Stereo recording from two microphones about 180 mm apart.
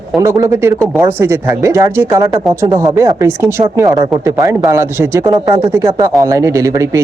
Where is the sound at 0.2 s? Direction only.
15° right (ahead or behind).